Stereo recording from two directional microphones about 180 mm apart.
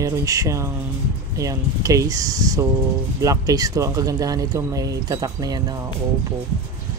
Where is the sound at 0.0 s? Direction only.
20° right (ahead or behind).